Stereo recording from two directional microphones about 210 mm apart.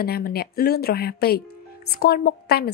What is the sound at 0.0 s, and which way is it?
A woman's voice, 45° left (ahead or behind).